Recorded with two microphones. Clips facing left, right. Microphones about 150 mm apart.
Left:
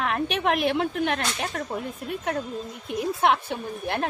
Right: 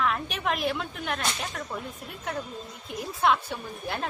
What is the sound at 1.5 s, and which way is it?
Speech, 40° left (ahead or behind).